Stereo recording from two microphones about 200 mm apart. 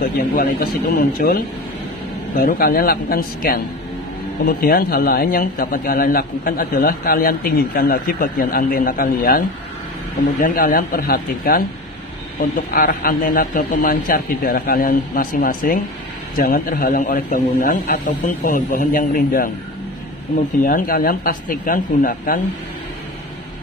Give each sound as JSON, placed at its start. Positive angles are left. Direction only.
{"t": 0.0, "sound": "a man's voice", "side_deg": 45}
{"t": 10.4, "sound": "a man's voice", "side_deg": 45}
{"t": 20.6, "sound": "a man's voice", "side_deg": 45}